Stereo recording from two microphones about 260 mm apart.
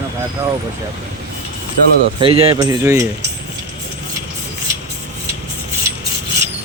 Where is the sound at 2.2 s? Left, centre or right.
Right.